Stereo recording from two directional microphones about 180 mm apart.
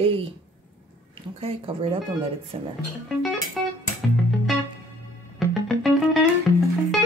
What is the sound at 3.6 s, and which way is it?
Music, centre (ahead or behind).